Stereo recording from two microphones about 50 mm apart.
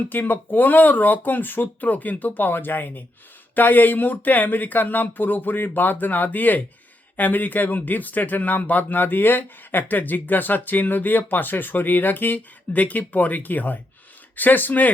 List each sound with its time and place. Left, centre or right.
0.1 s speech: left